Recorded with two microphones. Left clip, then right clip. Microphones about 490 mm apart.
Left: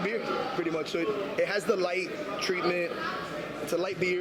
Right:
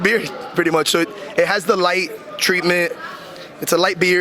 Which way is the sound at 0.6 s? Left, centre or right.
Right.